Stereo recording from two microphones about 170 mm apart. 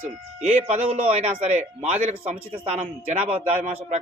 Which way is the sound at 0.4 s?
40° right (ahead or behind).